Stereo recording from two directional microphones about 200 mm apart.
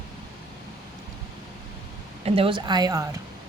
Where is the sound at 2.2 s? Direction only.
30° right (ahead or behind).